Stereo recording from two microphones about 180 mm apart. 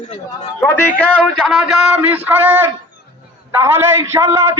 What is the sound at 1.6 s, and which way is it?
A man's voice, 10° right (ahead or behind).